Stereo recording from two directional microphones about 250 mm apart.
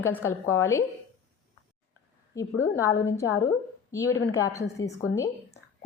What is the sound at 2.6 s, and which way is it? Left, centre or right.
A woman's voice, centre.